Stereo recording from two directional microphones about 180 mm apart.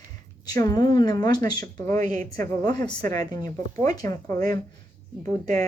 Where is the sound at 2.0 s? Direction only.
50° right (ahead or behind).